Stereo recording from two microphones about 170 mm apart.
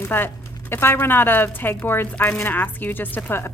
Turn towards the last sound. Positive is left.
turn(degrees=15)  # may be behind; listen again after turning